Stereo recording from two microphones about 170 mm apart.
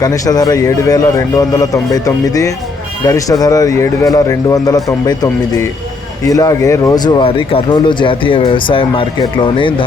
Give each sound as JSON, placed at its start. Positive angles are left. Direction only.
{"t": 0.0, "sound": "speech", "side_deg": 20}